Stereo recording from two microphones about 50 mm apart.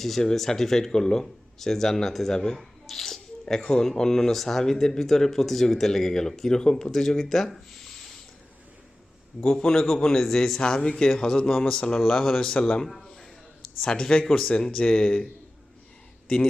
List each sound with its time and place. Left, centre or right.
0.0 s speech: centre
9.4 s speech: centre